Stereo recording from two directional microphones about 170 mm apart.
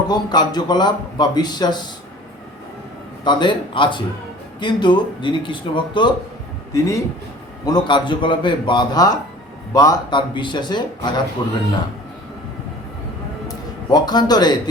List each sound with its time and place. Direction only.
0.1 s speech: 25° left (ahead or behind)
3.2 s speech: 30° left (ahead or behind)
13.9 s speech: 25° left (ahead or behind)